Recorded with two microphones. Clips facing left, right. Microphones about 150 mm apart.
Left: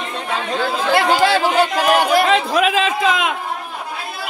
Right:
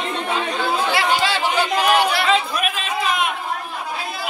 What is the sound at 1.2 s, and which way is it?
Chatter, 50° left (ahead or behind).